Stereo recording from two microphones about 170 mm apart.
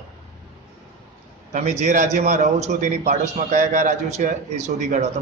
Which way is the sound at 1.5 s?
45° right (ahead or behind).